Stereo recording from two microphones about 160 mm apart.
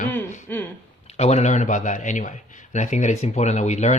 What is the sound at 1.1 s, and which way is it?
A man's voice, 45° left (ahead or behind).